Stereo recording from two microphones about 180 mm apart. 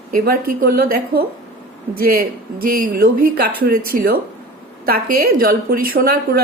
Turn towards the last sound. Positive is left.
turn(degrees=-55)  # may be behind; listen again after turning